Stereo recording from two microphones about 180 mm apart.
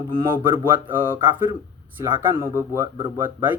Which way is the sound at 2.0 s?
15° right (ahead or behind).